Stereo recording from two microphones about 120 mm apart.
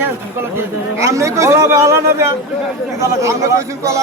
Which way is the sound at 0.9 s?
25° right (ahead or behind).